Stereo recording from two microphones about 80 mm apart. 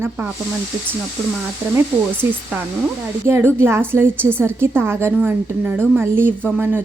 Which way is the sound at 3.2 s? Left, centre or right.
Right.